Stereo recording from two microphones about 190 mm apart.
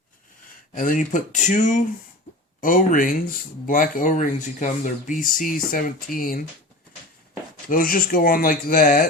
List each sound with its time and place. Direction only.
0.7 s speech: 45° left (ahead or behind)
7.7 s speech: 50° left (ahead or behind)